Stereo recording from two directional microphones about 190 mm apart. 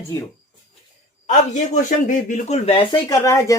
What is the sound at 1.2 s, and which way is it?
A man's voice, 40° left (ahead or behind).